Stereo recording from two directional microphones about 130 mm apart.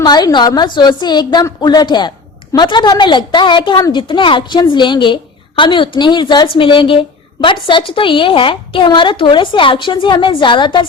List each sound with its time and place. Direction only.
0.0 s a woman's voice: 30° left (ahead or behind)